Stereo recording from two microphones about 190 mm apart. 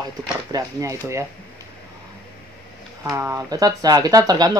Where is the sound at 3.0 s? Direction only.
15° right (ahead or behind).